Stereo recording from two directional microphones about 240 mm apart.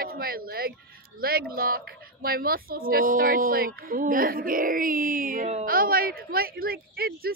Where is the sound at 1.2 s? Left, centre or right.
Right.